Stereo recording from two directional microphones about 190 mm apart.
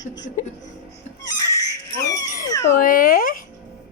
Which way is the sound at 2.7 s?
50° left (ahead or behind).